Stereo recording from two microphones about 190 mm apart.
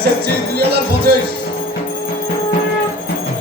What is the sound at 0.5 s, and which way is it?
Music, 55° right (ahead or behind).